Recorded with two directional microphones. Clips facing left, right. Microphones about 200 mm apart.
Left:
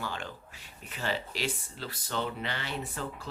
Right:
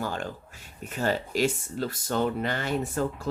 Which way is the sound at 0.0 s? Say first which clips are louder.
Right 6 dB; 45° right (ahead or behind).